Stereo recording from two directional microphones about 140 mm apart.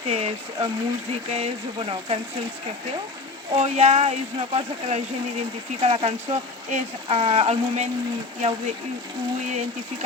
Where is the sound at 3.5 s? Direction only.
50° right (ahead or behind).